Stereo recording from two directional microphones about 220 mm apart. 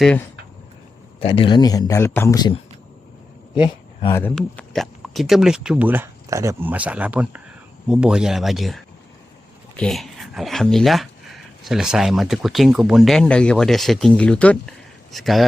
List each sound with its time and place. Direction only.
1.2 s speech: 25° left (ahead or behind)
3.6 s speech: 20° left (ahead or behind)
4.2 s speech: 5° left (ahead or behind)